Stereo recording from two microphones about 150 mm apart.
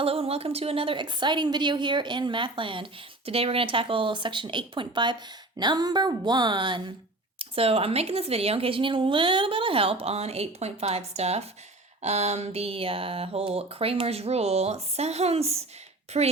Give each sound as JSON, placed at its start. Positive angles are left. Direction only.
{"t": 0.0, "sound": "a woman's voice", "side_deg": -40}